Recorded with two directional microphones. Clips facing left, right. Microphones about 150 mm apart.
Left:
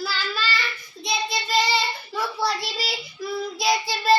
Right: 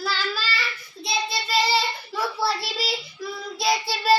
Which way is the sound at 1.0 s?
Centre (ahead or behind).